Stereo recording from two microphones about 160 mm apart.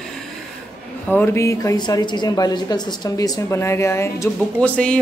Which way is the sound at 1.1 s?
15° left (ahead or behind).